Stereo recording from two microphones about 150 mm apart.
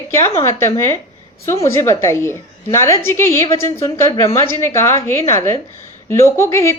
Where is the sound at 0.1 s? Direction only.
20° left (ahead or behind).